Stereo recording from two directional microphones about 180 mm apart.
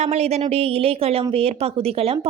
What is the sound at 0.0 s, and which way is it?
A woman's voice, 40° right (ahead or behind).